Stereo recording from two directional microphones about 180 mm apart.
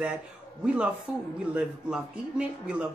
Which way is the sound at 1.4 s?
5° right (ahead or behind).